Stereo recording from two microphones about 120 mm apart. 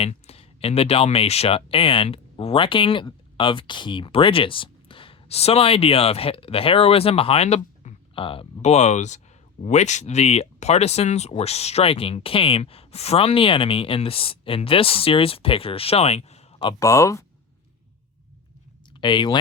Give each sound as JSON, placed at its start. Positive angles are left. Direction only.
{"t": 0.0, "sound": "speech", "side_deg": 55}
{"t": 8.6, "sound": "speech", "side_deg": 70}
{"t": 16.8, "sound": "speech", "side_deg": 25}
{"t": 18.9, "sound": "speech", "side_deg": 40}